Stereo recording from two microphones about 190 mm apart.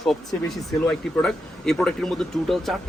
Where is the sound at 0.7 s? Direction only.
5° left (ahead or behind).